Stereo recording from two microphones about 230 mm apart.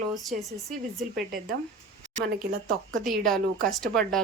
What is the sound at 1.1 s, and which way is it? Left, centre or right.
Speech, right.